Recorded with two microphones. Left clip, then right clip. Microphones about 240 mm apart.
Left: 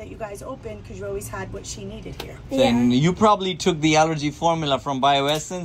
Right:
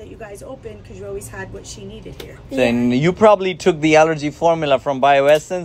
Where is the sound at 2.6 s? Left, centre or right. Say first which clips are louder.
Right 2 dB; right.